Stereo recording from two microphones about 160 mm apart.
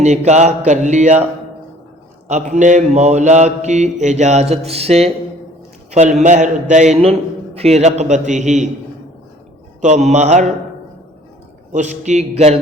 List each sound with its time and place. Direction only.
0.0 s mantra: 45° right (ahead or behind)
2.2 s mantra: 45° right (ahead or behind)
9.8 s mantra: 45° right (ahead or behind)
11.7 s mantra: 45° right (ahead or behind)